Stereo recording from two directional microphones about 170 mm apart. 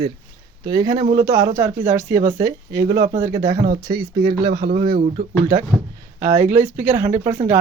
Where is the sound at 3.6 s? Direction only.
60° right (ahead or behind).